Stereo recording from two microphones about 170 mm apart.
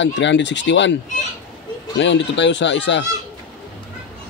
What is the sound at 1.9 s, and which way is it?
Speech, 90° left.